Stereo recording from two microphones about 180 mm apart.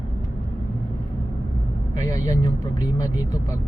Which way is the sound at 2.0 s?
20° left (ahead or behind).